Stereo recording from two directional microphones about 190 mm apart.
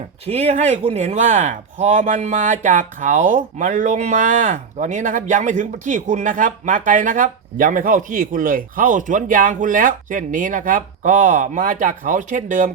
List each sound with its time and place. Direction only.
0.3 s speech: 35° right (ahead or behind)